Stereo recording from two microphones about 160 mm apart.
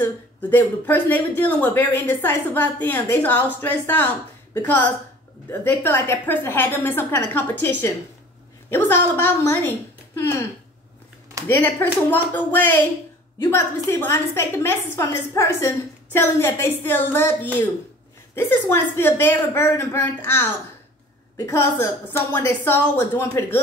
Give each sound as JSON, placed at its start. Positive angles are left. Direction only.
{"t": 0.0, "sound": "speech", "side_deg": 10}
{"t": 11.4, "sound": "speech", "side_deg": 10}